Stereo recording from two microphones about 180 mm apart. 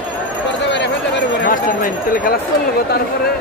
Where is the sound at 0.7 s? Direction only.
75° left (ahead or behind).